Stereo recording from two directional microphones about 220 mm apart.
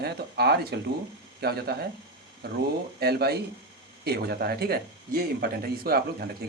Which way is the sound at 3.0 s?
45° right (ahead or behind).